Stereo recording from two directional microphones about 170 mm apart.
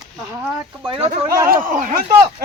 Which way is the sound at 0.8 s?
30° right (ahead or behind).